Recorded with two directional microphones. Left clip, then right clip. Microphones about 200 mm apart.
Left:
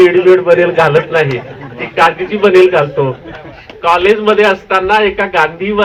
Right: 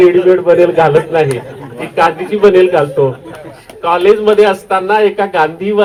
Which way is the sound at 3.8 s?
70° right (ahead or behind).